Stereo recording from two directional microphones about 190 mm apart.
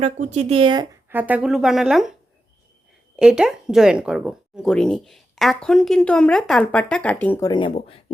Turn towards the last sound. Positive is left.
turn(degrees=30)  # may be behind; listen again after turning